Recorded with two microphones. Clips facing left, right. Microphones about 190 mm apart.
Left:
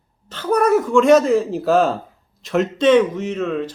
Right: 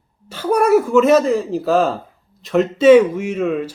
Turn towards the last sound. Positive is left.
turn(degrees=-10)  # may be behind; listen again after turning